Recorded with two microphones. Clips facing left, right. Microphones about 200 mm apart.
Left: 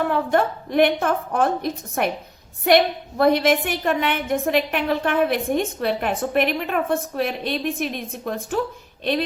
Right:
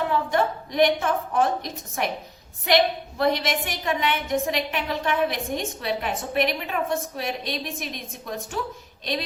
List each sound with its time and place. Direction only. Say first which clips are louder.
0.1 s a woman's voice: left 3 dB; 55° left (ahead or behind)